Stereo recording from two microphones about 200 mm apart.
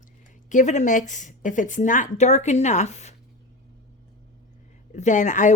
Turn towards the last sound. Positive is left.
turn(degrees=40)  # may be behind; listen again after turning